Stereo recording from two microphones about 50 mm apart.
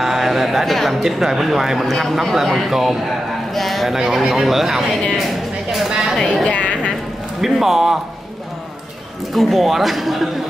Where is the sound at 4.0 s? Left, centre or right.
Centre.